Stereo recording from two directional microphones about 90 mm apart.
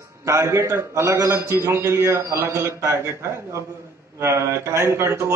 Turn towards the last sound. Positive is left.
turn(degrees=-30)  # may be behind; listen again after turning